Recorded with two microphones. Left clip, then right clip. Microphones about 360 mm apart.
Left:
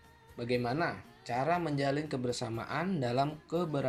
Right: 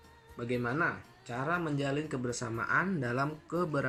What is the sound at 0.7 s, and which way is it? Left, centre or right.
Speech, centre.